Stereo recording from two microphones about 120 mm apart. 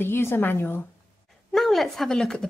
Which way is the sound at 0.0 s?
20° left (ahead or behind).